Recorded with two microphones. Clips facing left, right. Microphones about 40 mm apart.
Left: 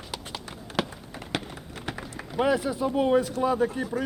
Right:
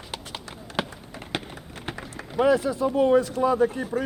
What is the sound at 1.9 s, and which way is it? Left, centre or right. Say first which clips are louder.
Run: even; right.